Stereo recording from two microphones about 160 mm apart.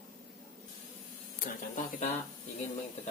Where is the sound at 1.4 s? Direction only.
55° left (ahead or behind).